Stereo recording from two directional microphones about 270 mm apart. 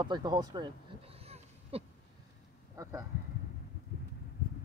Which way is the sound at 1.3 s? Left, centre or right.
Right.